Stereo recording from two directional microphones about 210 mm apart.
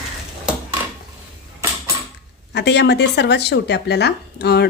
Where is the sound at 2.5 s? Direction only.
55° left (ahead or behind).